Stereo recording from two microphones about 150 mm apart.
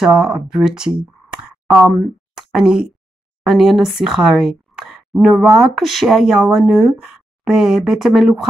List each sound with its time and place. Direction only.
0.0 s speech: 5° right (ahead or behind)